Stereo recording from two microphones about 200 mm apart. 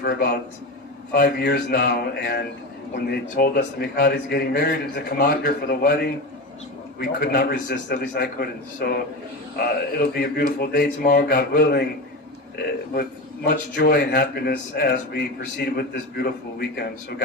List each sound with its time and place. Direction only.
0.0 s speech: 50° left (ahead or behind)